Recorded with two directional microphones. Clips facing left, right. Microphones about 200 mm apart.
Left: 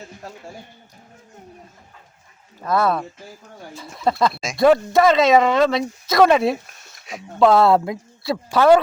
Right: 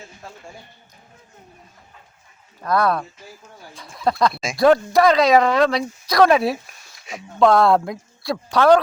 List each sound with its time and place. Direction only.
0.2 s speech: 40° left (ahead or behind)
2.6 s speech: 5° left (ahead or behind)